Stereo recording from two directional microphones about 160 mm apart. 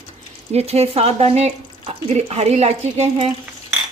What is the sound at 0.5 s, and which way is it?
Speech, 40° right (ahead or behind).